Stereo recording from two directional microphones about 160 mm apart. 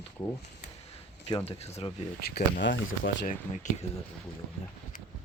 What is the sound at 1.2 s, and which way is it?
Speech, 35° left (ahead or behind).